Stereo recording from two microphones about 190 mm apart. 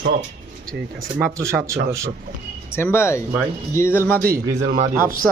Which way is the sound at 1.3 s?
15° right (ahead or behind).